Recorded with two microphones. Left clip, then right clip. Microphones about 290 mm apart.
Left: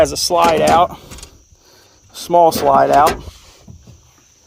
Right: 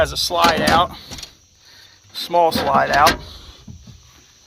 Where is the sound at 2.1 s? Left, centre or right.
Left.